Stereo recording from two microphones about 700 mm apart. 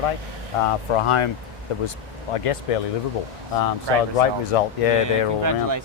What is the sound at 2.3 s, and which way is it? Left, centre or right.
Speech, left.